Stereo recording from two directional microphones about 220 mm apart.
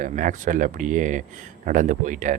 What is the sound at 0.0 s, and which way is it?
Speech, 35° right (ahead or behind).